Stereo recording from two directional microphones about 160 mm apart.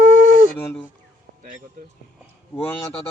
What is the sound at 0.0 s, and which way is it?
Dog, 55° right (ahead or behind).